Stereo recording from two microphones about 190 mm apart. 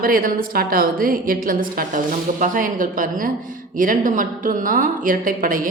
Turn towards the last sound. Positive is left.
turn(degrees=-45)  # may be behind; listen again after turning